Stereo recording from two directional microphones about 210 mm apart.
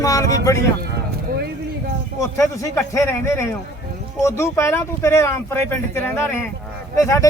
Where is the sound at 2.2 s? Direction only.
15° left (ahead or behind).